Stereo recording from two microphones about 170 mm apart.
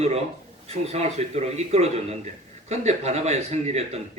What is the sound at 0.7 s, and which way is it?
A man's voice, 40° right (ahead or behind).